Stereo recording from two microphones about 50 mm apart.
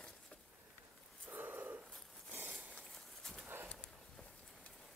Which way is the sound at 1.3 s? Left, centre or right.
Right.